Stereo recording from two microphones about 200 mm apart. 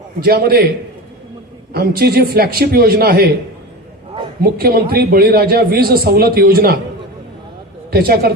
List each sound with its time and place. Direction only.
0.2 s a man's voice: 50° right (ahead or behind)
1.7 s a man's voice: 50° right (ahead or behind)
4.4 s a man's voice: 50° right (ahead or behind)
7.9 s a man's voice: 50° right (ahead or behind)